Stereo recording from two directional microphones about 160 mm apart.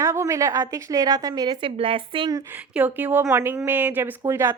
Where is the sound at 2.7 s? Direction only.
10° right (ahead or behind).